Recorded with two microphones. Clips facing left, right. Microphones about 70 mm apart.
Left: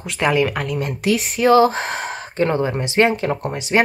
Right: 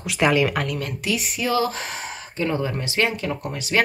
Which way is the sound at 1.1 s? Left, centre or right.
Left.